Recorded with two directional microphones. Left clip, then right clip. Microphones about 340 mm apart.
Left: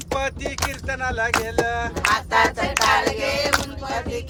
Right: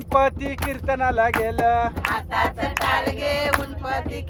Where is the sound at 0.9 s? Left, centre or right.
Centre.